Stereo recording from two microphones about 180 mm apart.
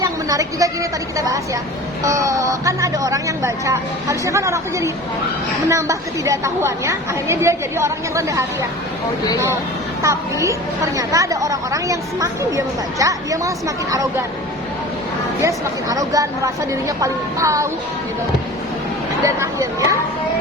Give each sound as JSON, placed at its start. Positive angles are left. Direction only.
{"t": 0.0, "sound": "a woman's voice", "side_deg": -20}
{"t": 10.0, "sound": "a woman's voice", "side_deg": -15}
{"t": 15.4, "sound": "a woman's voice", "side_deg": -20}
{"t": 19.2, "sound": "a woman's voice", "side_deg": -15}